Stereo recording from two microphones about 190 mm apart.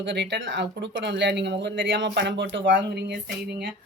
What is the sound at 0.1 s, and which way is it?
A woman's voice, 70° right (ahead or behind).